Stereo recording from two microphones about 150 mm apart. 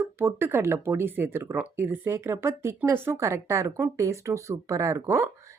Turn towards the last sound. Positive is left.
turn(degrees=-15)  # may be behind; listen again after turning